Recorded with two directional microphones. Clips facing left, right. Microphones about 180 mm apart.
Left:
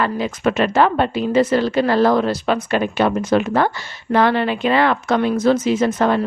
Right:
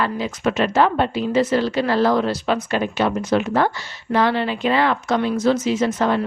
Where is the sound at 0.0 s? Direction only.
55° left (ahead or behind).